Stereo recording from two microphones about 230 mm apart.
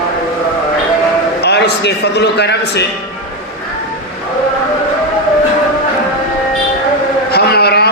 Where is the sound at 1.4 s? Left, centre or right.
Left.